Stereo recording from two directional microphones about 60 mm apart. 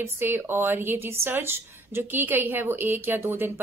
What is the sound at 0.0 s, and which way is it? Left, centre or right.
A woman's voice, right.